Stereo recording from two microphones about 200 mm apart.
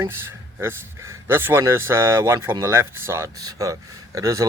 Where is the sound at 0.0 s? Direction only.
10° right (ahead or behind).